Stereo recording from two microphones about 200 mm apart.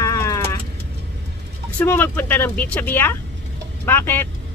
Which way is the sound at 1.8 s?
10° left (ahead or behind).